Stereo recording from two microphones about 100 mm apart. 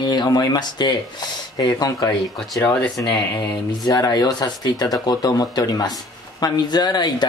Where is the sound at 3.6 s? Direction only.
40° left (ahead or behind).